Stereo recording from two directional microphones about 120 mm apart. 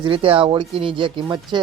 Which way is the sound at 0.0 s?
45° right (ahead or behind).